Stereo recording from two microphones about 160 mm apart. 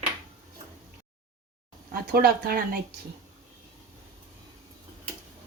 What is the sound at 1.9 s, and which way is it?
Speech, 70° right (ahead or behind).